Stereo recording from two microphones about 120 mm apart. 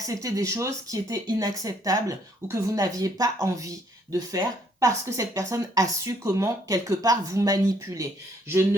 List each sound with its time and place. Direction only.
0.0 s speech: 30° right (ahead or behind)